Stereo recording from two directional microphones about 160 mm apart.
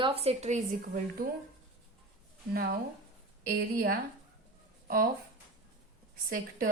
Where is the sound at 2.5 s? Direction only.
65° right (ahead or behind).